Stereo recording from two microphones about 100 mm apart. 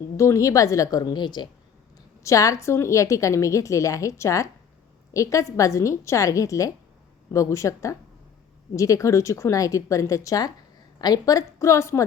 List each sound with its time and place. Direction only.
0.2 s a woman's voice: 30° left (ahead or behind); by 1.5 s 50° left (ahead or behind)
2.2 s a woman's voice: 35° left (ahead or behind)